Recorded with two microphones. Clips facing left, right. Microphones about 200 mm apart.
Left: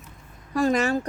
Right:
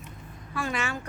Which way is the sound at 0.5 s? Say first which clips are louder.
Left 10 dB; 40° left (ahead or behind).